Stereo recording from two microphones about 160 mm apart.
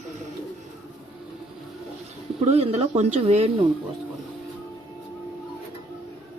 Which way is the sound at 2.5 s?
40° right (ahead or behind).